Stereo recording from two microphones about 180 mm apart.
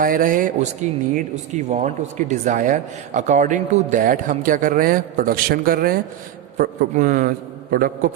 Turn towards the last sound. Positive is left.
turn(degrees=-50)  # may be behind; listen again after turning